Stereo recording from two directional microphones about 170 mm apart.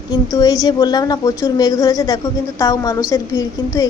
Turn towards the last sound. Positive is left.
turn(degrees=20)  # may be behind; listen again after turning